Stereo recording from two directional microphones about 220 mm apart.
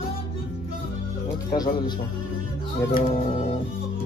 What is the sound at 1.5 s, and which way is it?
Music, 20° left (ahead or behind).